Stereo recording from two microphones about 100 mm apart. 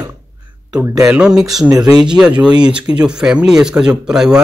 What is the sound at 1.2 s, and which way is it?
Speech, 5° right (ahead or behind).